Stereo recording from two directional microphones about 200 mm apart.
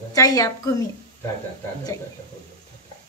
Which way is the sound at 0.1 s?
15° left (ahead or behind).